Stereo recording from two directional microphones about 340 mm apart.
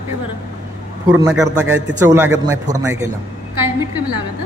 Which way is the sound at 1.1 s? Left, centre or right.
Centre.